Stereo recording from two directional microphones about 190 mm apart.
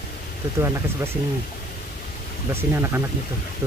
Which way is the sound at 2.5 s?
15° right (ahead or behind).